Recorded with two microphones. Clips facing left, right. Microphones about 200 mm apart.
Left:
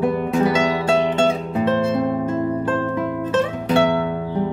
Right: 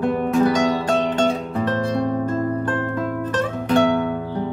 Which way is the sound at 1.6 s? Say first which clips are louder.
Left 4 dB; 20° left (ahead or behind).